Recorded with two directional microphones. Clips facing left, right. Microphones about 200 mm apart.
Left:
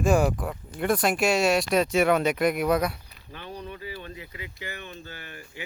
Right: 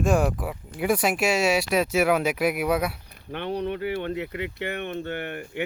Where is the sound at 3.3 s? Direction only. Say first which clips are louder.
Right 10 dB; 70° right (ahead or behind).